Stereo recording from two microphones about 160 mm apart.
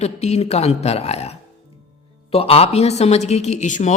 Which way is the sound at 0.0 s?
45° left (ahead or behind).